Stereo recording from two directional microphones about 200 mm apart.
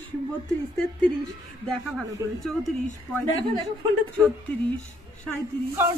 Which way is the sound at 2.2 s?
15° right (ahead or behind).